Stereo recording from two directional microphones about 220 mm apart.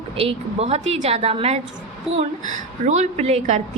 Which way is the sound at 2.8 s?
30° right (ahead or behind).